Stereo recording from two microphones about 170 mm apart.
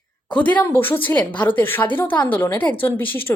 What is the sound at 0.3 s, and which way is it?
Speech, 10° left (ahead or behind).